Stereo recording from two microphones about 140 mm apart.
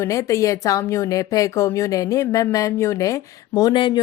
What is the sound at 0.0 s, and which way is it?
A woman's voice, 20° left (ahead or behind).